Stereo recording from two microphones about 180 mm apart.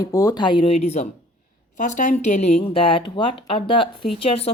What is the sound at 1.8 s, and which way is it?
A woman's voice, 45° left (ahead or behind).